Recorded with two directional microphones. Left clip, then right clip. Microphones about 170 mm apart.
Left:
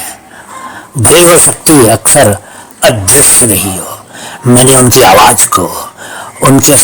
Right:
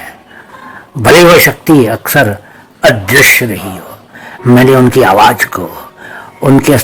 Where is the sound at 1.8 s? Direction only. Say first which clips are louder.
Left 4 dB; 10° left (ahead or behind).